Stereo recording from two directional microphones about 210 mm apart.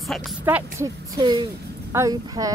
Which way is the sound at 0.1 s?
5° right (ahead or behind).